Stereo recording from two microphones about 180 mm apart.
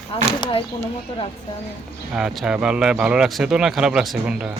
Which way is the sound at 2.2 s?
5° right (ahead or behind).